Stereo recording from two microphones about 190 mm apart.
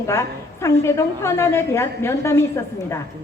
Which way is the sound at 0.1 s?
15° left (ahead or behind).